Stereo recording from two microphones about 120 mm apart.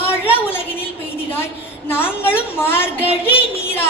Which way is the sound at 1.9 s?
20° left (ahead or behind).